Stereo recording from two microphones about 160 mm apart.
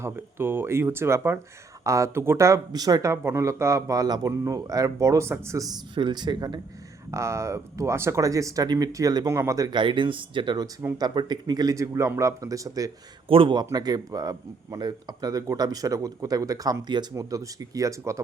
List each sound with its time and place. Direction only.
0.0 s a man's voice: 15° right (ahead or behind)
13.2 s a man's voice: 35° right (ahead or behind)